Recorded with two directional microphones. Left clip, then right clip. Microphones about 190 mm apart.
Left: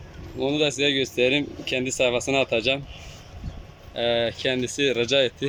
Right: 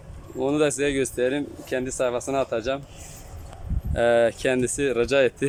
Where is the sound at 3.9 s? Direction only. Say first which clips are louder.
Right 4 dB; 10° right (ahead or behind).